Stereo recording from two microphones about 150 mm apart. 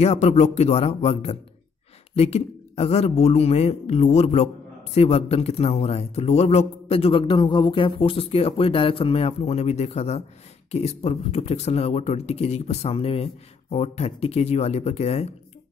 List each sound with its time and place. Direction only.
0.0 s speech: 45° left (ahead or behind)